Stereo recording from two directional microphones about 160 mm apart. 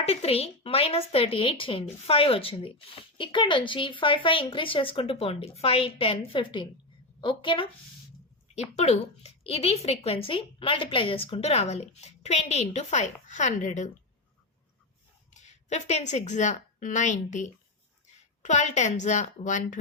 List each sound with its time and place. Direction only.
0.0 s speech: 40° left (ahead or behind)
8.7 s speech: 40° left (ahead or behind)
15.3 s a woman's voice: 50° left (ahead or behind)